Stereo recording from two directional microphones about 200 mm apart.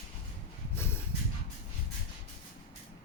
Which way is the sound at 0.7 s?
10° left (ahead or behind).